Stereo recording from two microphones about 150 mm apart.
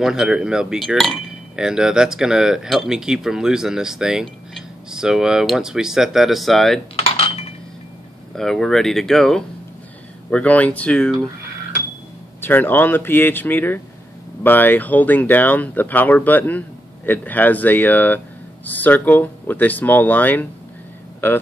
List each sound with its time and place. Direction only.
0.0 s speech: 5° right (ahead or behind)
7.0 s cutlery: 40° left (ahead or behind)
8.4 s speech: centre (ahead or behind)
12.4 s speech: 15° left (ahead or behind)